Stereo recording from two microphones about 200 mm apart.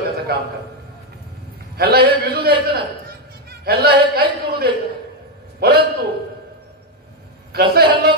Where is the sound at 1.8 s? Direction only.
50° right (ahead or behind).